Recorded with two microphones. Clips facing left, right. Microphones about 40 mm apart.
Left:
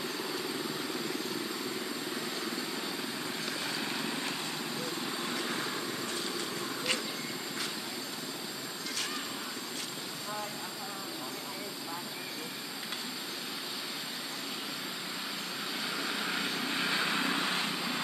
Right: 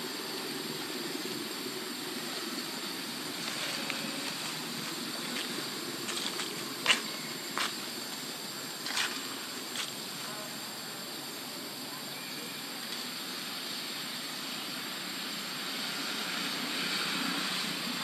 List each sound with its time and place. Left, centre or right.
6.9 s vehicle: right
16.0 s vehicle: centre